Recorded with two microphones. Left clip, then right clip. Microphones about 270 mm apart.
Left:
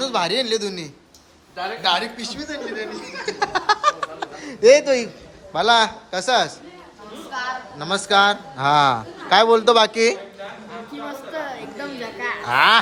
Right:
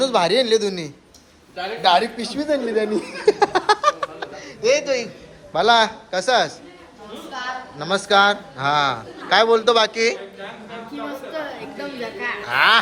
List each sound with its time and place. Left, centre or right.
0.0 s a man's voice: centre
4.6 s a man's voice: left
5.5 s a man's voice: centre
7.8 s a man's voice: centre
12.5 s a man's voice: centre